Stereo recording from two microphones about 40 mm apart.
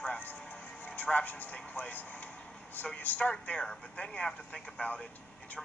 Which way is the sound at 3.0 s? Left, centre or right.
Left.